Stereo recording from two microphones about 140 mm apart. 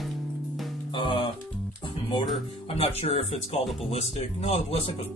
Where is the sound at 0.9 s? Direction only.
35° left (ahead or behind).